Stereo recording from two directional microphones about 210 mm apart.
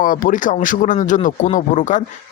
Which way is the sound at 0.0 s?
40° left (ahead or behind).